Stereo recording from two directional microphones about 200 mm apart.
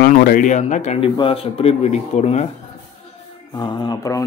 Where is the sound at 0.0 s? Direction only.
45° left (ahead or behind).